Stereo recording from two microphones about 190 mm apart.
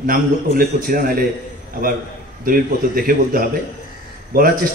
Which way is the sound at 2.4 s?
50° right (ahead or behind).